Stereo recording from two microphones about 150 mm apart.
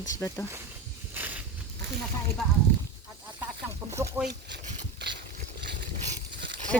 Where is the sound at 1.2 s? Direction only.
10° right (ahead or behind).